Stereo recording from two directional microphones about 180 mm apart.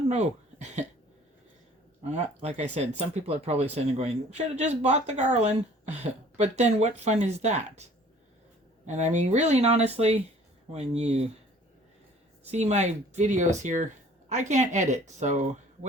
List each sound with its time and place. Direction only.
0.1 s speech: 40° right (ahead or behind)
2.0 s speech: 40° right (ahead or behind)
8.9 s speech: 40° right (ahead or behind)
12.5 s speech: 35° right (ahead or behind)